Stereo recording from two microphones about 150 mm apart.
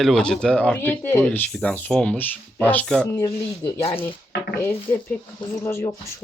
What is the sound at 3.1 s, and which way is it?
Speech, 20° left (ahead or behind).